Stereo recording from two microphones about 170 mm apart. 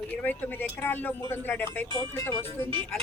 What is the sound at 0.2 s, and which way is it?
Speech, 10° left (ahead or behind).